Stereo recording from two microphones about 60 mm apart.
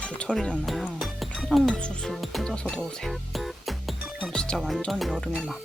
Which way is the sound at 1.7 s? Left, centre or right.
Centre.